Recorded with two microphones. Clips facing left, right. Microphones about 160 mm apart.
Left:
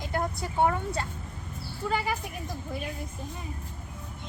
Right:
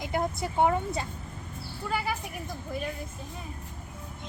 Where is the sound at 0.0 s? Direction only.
15° right (ahead or behind).